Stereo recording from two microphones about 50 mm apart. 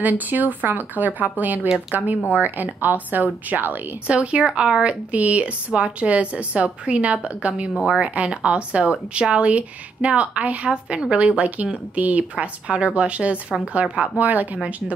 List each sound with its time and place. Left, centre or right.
0.0 s a woman's voice: right
4.1 s a woman's voice: right
5.1 s a woman's voice: right